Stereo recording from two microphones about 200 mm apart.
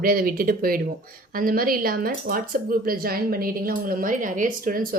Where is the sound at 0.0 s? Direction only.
45° right (ahead or behind).